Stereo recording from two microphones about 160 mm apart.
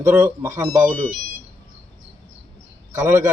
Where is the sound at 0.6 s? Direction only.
20° right (ahead or behind).